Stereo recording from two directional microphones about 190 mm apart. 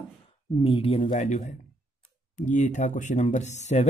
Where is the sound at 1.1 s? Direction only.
45° left (ahead or behind).